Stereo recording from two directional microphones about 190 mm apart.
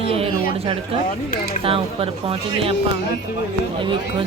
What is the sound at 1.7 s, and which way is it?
Speech, 30° right (ahead or behind).